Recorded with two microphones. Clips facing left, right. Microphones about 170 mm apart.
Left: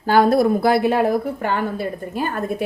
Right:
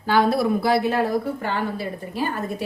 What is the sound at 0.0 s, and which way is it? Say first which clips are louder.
A woman's voice: left 4 dB; 45° left (ahead or behind).